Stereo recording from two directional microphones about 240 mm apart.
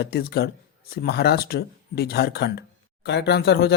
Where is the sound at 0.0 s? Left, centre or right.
Left.